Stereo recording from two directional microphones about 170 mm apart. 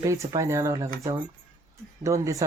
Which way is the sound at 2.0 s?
20° right (ahead or behind).